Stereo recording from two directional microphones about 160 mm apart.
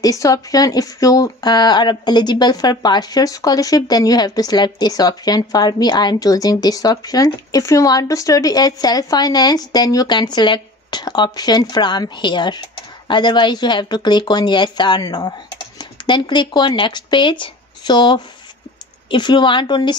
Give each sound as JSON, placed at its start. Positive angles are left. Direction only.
{"t": 0.0, "sound": "speech", "side_deg": 20}